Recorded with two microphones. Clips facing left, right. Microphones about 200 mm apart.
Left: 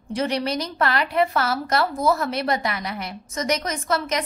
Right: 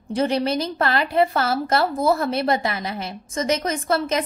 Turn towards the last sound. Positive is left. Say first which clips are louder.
# right 3 dB
turn(degrees=-30)  # may be behind; listen again after turning